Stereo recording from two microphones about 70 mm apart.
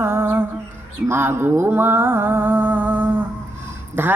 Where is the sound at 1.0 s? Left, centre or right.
Right.